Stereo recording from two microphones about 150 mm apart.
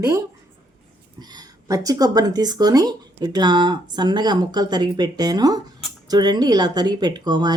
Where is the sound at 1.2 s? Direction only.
25° right (ahead or behind).